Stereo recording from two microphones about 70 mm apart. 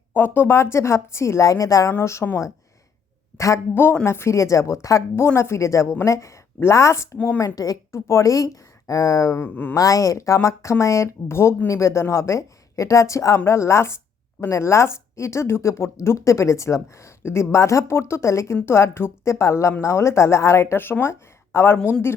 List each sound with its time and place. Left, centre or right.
0.1 s speech: left
2.0 s speech: left
3.3 s a man's voice: left
5.1 s speech: left
7.3 s a woman's voice: left
9.4 s speech: left
9.7 s speech: left